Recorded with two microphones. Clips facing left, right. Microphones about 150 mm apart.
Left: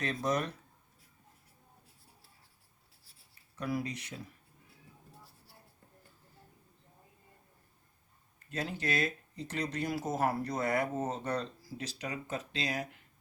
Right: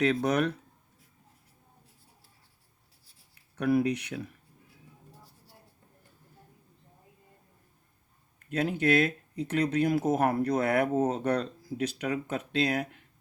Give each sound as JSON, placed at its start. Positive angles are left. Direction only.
{"t": 0.0, "sound": "speech", "side_deg": -65}
{"t": 3.3, "sound": "speech", "side_deg": -65}
{"t": 8.5, "sound": "speech", "side_deg": -55}